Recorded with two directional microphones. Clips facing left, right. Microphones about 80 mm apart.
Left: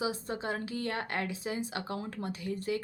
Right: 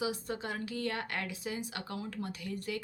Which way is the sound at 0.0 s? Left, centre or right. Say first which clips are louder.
Left 2 dB; left.